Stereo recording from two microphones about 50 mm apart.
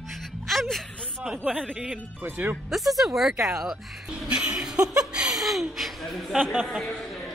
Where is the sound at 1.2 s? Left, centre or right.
Right.